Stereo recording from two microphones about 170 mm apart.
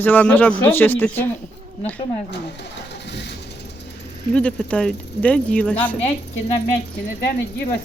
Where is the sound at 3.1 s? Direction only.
90° left.